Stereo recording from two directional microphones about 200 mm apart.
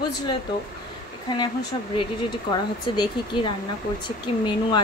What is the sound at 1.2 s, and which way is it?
Speech, 20° left (ahead or behind).